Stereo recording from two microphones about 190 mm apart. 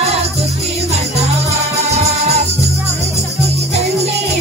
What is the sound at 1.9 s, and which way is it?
Music, 35° right (ahead or behind).